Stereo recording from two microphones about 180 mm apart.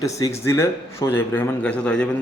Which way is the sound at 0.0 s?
15° left (ahead or behind).